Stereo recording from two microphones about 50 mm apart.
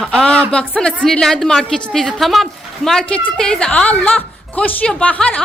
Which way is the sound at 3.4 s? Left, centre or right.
Centre.